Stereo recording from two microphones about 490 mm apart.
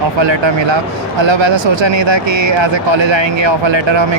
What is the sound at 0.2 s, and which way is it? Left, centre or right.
Speech, right.